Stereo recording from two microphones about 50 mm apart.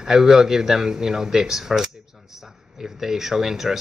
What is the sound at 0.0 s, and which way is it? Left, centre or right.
A man's voice, centre.